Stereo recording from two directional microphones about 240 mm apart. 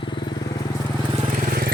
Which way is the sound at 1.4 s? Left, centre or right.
Right.